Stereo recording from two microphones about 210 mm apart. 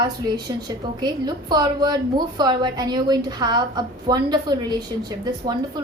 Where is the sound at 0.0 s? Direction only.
20° right (ahead or behind).